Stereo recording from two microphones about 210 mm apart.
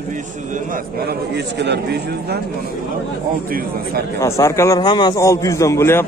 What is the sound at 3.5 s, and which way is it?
Speech, 45° right (ahead or behind).